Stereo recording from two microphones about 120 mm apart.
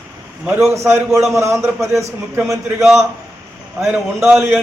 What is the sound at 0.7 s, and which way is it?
Speech, 20° right (ahead or behind).